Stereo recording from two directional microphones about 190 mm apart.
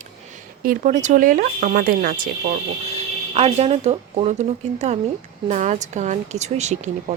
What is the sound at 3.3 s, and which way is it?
A woman's voice, 35° right (ahead or behind).